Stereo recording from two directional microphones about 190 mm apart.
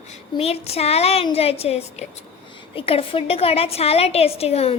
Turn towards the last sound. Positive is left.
turn(degrees=30)  # may be behind; listen again after turning